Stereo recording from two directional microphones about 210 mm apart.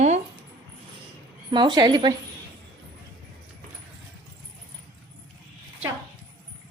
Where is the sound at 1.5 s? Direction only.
20° right (ahead or behind).